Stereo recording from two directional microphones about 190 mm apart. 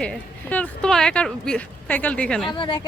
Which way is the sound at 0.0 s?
5° left (ahead or behind).